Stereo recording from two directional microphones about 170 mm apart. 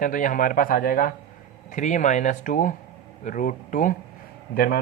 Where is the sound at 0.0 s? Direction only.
50° left (ahead or behind).